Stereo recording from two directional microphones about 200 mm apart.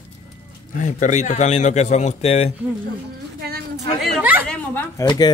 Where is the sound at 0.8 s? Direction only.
35° left (ahead or behind).